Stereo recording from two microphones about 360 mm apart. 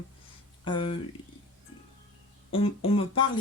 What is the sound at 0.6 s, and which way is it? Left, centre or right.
Speech, centre.